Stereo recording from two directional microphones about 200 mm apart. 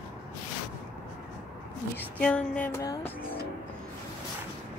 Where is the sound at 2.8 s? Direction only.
15° left (ahead or behind).